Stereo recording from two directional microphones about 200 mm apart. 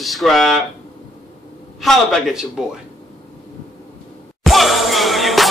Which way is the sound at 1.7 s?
Centre (ahead or behind).